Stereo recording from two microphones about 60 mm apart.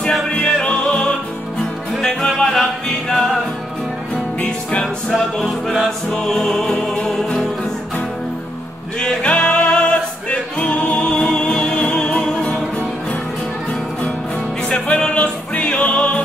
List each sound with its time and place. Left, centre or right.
0.3 s music: centre
4.4 s music: left
5.4 s music: centre
6.1 s music: centre
9.2 s music: left
14.7 s music: centre